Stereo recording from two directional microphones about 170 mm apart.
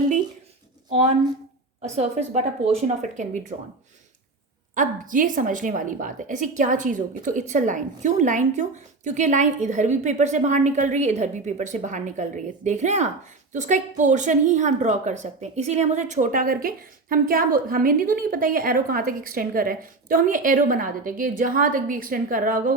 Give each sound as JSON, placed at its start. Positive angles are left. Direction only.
{"t": 0.9, "sound": "a woman's voice", "side_deg": -40}
{"t": 4.7, "sound": "a woman's voice", "side_deg": -50}